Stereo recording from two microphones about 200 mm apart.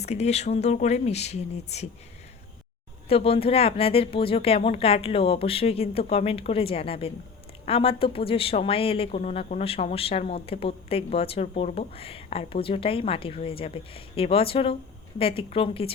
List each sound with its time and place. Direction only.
0.0 s speech: 35° left (ahead or behind)
3.1 s speech: 30° left (ahead or behind)